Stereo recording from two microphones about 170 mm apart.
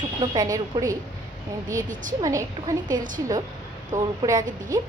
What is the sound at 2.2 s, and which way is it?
A woman's voice, 20° right (ahead or behind).